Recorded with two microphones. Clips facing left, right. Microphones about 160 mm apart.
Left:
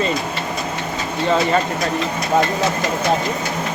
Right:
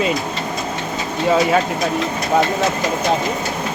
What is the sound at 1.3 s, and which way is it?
Speech, 5° right (ahead or behind).